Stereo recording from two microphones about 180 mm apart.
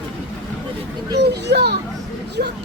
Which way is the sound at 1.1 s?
70° right (ahead or behind).